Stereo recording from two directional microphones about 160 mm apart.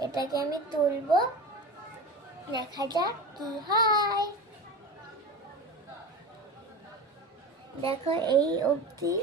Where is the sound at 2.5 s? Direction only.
25° right (ahead or behind).